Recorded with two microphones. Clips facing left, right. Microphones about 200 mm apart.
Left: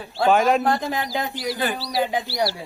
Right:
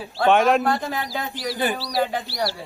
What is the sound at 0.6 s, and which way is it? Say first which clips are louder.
Speech: left 1 dB; 15° left (ahead or behind).